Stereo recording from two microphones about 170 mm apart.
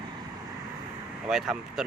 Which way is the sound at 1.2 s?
5° right (ahead or behind).